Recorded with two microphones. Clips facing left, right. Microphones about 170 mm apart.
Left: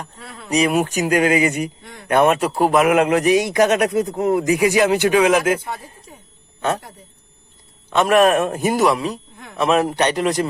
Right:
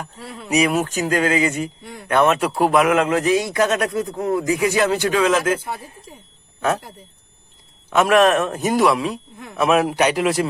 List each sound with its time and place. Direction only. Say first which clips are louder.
0.0 s a man's voice: right 2 dB; 5° right (ahead or behind)
0.7 s speech: left 2 dB; 15° left (ahead or behind)
1.8 s a sound: right 3 dB; 5° right (ahead or behind)
2.0 s speech: left 2 dB; 15° left (ahead or behind)
2.4 s a man's voice: left 1 dB; centre (ahead or behind)
2.9 s speech: left 2 dB; 15° left (ahead or behind)
6.6 s a man's voice: right 1 dB; centre (ahead or behind)